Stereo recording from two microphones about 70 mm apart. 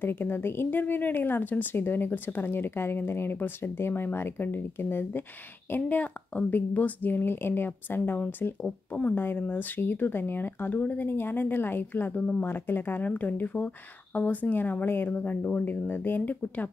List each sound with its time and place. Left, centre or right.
0.0 s speech: left